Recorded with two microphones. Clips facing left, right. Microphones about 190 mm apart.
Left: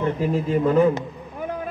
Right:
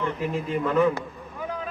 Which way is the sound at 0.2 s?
40° left (ahead or behind).